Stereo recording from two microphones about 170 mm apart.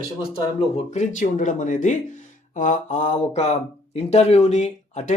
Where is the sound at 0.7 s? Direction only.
45° left (ahead or behind).